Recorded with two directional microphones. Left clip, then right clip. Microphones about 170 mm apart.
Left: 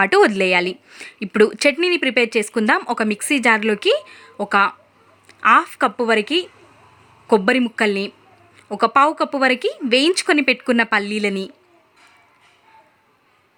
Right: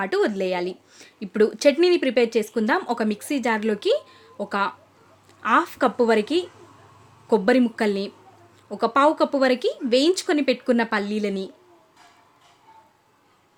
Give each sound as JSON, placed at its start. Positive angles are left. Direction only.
{"t": 0.0, "sound": "a woman's voice", "side_deg": 25}